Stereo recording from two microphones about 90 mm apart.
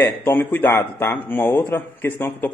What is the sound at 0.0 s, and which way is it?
A man's voice, 25° left (ahead or behind).